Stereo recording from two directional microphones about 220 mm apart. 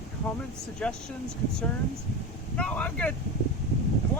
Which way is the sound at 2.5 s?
5° left (ahead or behind).